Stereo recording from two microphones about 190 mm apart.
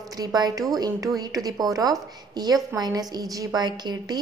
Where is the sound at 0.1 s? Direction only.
20° right (ahead or behind).